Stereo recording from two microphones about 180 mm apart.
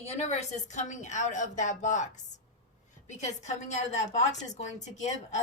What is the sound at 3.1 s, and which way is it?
A woman's voice, 40° left (ahead or behind).